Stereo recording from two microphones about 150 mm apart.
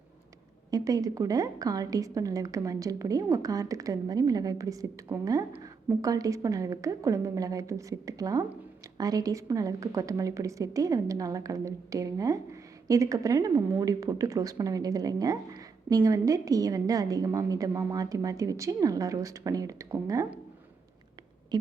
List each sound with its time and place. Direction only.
0.7 s a woman's voice: 25° right (ahead or behind)